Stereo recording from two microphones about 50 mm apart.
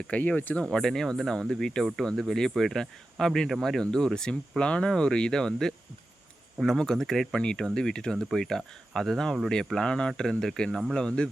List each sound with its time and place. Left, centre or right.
0.1 s speech: left
0.6 s speech: centre
6.7 s speech: centre
7.3 s speech: centre